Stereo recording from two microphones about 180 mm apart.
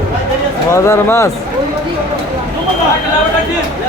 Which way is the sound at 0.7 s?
15° left (ahead or behind).